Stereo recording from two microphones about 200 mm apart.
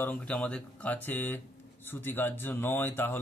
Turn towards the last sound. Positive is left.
turn(degrees=10)  # may be behind; listen again after turning